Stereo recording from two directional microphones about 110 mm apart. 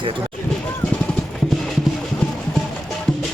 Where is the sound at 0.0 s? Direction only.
50° right (ahead or behind).